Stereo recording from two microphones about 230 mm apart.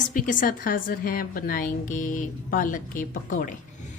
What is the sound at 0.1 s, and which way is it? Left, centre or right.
A woman's voice, left.